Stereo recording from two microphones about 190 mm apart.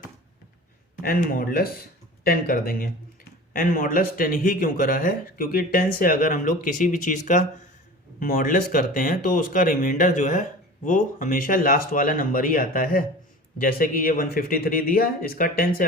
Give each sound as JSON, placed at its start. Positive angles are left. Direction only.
{"t": 1.0, "sound": "speech", "side_deg": 50}